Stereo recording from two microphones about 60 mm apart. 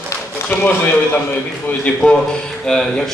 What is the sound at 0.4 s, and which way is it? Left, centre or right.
Speech, left.